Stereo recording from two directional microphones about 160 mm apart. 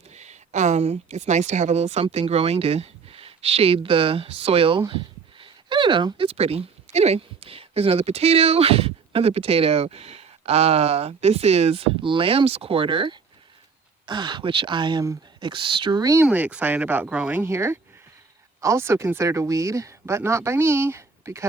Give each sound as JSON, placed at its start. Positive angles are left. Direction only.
{"t": 0.1, "sound": "speech", "side_deg": -45}
{"t": 16.2, "sound": "speech", "side_deg": -10}